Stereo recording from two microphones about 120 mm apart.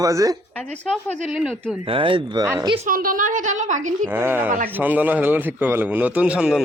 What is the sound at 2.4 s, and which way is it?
Speech, 30° right (ahead or behind).